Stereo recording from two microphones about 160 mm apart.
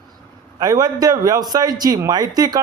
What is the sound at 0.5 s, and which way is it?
A man's voice, 25° right (ahead or behind).